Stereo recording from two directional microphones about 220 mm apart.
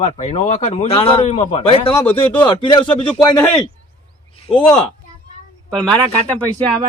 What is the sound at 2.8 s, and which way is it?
Speech, 5° left (ahead or behind).